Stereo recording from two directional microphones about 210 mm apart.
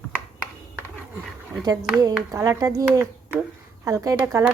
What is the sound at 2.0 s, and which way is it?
A woman's voice, 15° right (ahead or behind).